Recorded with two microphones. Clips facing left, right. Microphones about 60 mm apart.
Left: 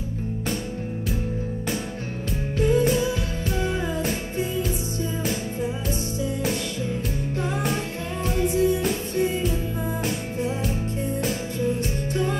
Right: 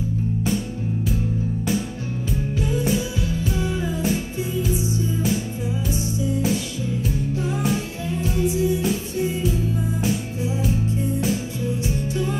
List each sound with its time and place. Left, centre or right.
3.5 s music: left
8.4 s music: left
11.6 s music: left